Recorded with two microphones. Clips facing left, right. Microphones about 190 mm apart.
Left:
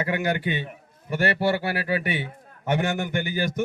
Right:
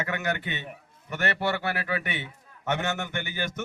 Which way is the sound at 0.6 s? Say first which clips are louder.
Left 4 dB; 35° left (ahead or behind).